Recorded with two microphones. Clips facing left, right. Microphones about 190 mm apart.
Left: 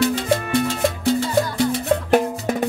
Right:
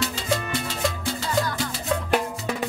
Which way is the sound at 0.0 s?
55° left (ahead or behind).